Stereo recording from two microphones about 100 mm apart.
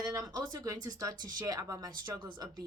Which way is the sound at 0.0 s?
40° right (ahead or behind).